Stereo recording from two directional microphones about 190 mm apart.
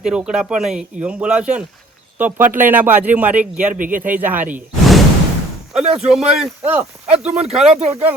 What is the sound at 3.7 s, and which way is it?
Speech, 45° right (ahead or behind).